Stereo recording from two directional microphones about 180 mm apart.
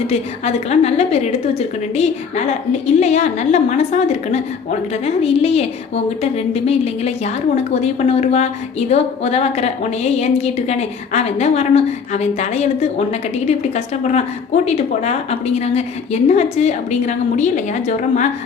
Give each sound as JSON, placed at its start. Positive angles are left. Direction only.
{"t": 0.1, "sound": "a woman's voice", "side_deg": 35}